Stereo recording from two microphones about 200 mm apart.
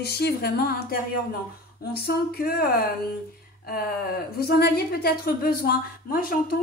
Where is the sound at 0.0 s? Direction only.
55° left (ahead or behind).